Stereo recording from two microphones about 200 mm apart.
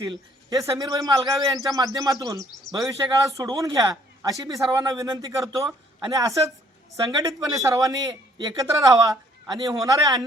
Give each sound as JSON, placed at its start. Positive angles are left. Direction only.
{"t": 0.0, "sound": "a man's voice", "side_deg": -20}